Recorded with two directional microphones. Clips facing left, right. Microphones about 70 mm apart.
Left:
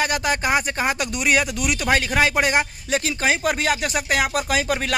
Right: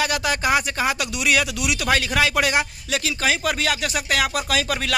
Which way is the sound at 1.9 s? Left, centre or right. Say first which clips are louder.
Left 1 dB; left.